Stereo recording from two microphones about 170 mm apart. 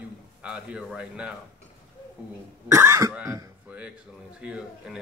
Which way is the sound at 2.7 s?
20° right (ahead or behind).